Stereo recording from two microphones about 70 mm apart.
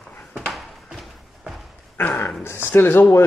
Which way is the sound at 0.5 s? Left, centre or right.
Centre.